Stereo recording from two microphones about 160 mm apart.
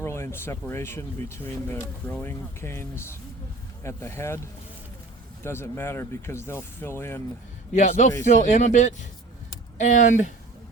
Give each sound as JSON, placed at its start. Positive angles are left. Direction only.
{"t": 0.0, "sound": "speech", "side_deg": 15}
{"t": 5.4, "sound": "speech", "side_deg": 15}
{"t": 7.7, "sound": "speech", "side_deg": 50}